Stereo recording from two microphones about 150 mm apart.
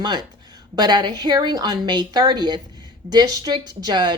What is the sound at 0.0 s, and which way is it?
Speech, 30° right (ahead or behind).